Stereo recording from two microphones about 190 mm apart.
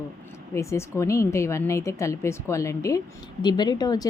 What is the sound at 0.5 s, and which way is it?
A woman's voice, 15° left (ahead or behind).